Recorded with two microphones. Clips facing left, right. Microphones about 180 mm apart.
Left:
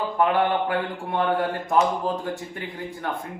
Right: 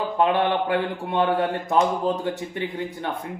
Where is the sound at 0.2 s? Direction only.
25° right (ahead or behind).